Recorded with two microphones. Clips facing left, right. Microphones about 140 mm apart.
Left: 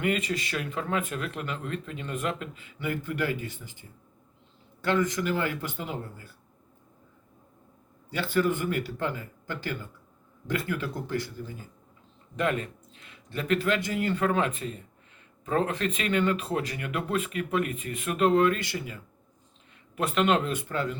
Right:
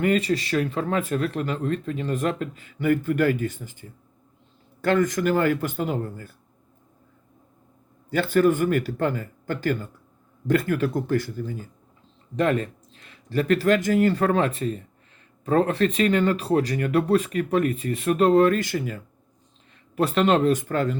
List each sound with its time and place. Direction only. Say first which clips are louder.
0.0 s speech: right 6 dB; 40° right (ahead or behind)
8.1 s speech: right 7 dB; 45° right (ahead or behind)
12.4 s speech: right 6 dB; 35° right (ahead or behind)
20.0 s speech: right 5 dB; 35° right (ahead or behind)